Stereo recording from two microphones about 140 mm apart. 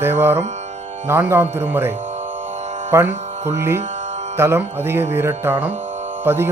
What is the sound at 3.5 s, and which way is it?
Speech, 20° right (ahead or behind).